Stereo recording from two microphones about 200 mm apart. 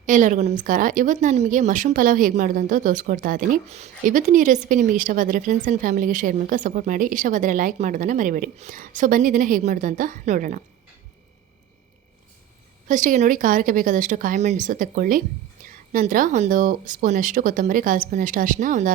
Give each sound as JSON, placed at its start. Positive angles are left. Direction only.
{"t": 0.0, "sound": "a woman's voice", "side_deg": -40}
{"t": 12.9, "sound": "a woman's voice", "side_deg": -40}